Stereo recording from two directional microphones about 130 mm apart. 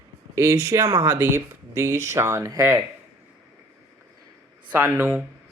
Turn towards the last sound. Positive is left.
turn(degrees=-20)  # may be behind; listen again after turning